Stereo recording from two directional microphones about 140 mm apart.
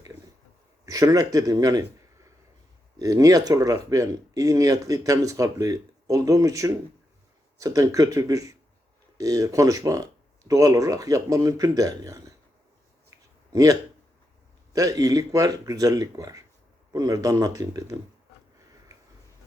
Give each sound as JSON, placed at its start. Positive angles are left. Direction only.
{"t": 0.9, "sound": "speech", "side_deg": -25}
{"t": 3.0, "sound": "speech", "side_deg": -25}
{"t": 13.5, "sound": "speech", "side_deg": -25}